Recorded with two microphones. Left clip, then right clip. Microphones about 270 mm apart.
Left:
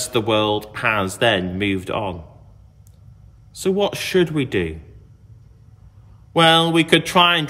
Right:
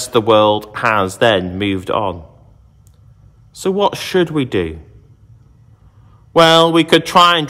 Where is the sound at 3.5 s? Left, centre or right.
Centre.